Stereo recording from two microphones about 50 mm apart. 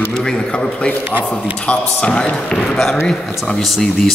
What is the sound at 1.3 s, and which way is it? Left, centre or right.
Speech, left.